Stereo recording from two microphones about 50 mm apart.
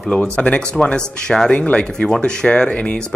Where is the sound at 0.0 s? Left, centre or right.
Left.